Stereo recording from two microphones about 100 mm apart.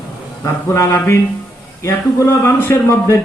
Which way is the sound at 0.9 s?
20° left (ahead or behind).